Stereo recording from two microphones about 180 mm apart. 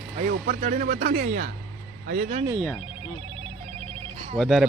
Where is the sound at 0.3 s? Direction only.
45° right (ahead or behind).